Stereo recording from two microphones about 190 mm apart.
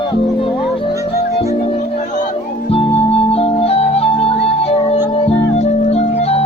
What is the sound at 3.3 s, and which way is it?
Music, 30° left (ahead or behind).